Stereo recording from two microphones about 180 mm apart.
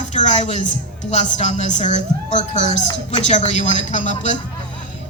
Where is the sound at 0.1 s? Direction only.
40° left (ahead or behind).